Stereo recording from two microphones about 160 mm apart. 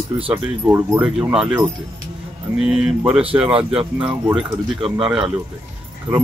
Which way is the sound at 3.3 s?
20° right (ahead or behind).